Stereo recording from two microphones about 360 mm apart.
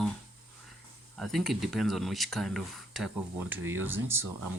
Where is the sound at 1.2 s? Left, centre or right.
Centre.